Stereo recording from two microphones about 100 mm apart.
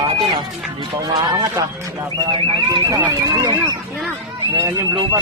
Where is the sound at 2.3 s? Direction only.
50° right (ahead or behind).